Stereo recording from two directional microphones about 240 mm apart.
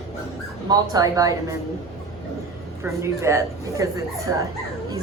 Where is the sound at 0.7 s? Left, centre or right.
Centre.